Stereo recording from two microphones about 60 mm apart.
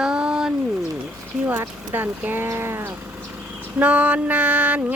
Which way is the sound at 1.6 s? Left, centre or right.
Right.